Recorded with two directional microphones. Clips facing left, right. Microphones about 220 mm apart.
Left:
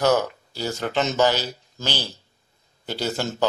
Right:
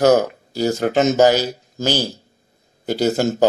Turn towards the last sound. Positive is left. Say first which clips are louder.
# right 9 dB
turn(degrees=-45)  # may be behind; listen again after turning